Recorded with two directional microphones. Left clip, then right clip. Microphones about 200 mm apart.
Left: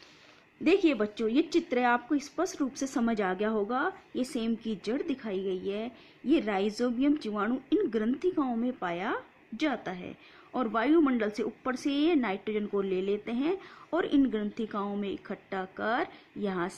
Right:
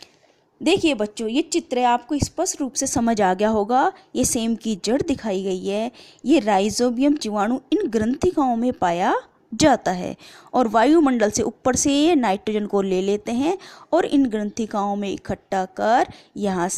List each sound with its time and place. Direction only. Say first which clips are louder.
0.6 s a woman's voice: right 6 dB; 30° right (ahead or behind)